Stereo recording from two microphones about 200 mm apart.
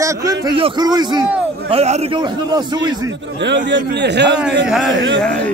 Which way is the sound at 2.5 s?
20° right (ahead or behind).